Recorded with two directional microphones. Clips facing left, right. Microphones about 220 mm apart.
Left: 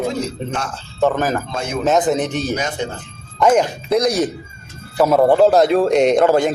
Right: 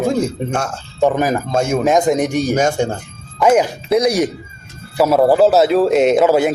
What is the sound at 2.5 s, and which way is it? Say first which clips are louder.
Speech: right 7 dB; 45° right (ahead or behind).